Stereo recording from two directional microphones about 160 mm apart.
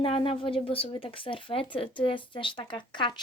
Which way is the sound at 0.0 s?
35° left (ahead or behind).